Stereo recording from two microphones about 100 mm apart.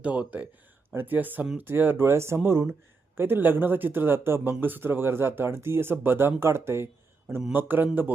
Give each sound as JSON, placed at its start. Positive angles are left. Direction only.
{"t": 0.0, "sound": "speech", "side_deg": -15}